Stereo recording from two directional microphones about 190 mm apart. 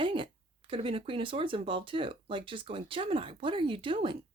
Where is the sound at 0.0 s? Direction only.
25° right (ahead or behind).